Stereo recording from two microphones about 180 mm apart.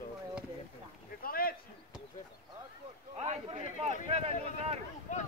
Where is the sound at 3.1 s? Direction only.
35° right (ahead or behind).